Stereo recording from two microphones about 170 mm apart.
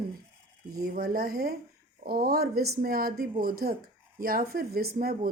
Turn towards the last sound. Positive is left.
turn(degrees=-60)  # may be behind; listen again after turning